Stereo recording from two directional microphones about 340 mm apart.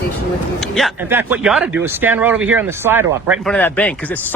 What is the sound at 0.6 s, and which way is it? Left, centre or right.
Speech, centre.